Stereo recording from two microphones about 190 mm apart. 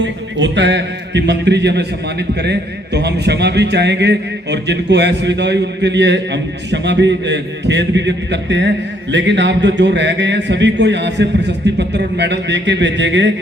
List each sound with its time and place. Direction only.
0.0 s a man's voice: 70° right (ahead or behind)